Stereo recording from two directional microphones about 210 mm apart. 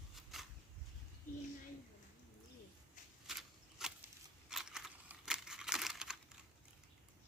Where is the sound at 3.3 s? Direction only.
Centre (ahead or behind).